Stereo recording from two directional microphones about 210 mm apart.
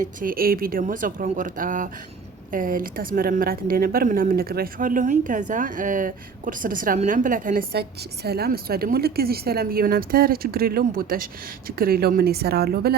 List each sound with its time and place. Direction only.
0.0 s speech: 40° right (ahead or behind)